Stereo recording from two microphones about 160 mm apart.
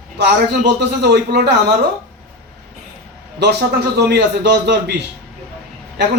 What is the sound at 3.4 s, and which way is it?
A man's voice, 90° right.